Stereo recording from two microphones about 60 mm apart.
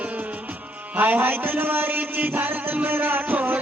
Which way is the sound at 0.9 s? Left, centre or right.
Right.